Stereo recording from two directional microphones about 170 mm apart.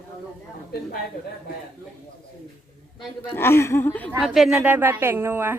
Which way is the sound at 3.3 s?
15° left (ahead or behind).